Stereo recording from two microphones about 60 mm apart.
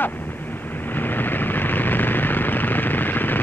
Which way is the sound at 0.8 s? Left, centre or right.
Left.